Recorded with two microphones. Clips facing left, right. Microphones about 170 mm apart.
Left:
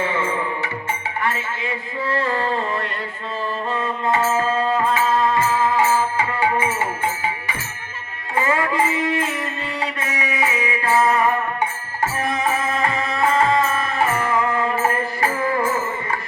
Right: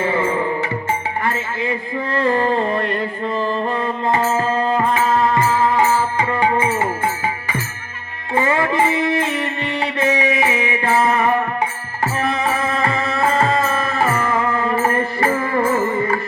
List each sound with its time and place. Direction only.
0.0 s music: 35° right (ahead or behind)
2.0 s a sound: 40° right (ahead or behind)
3.8 s music: 35° right (ahead or behind)
8.4 s music: 25° right (ahead or behind)
12.4 s music: 35° right (ahead or behind)